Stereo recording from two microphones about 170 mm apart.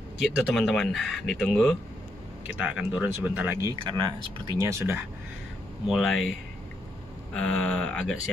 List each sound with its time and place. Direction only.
0.2 s speech: centre (ahead or behind)
3.9 s speech: 25° right (ahead or behind)
5.9 s speech: centre (ahead or behind)
7.3 s speech: 5° left (ahead or behind)